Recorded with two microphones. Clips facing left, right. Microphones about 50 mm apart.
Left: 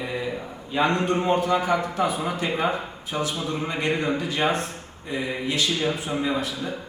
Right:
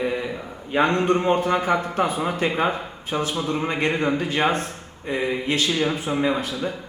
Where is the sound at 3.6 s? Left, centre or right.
Right.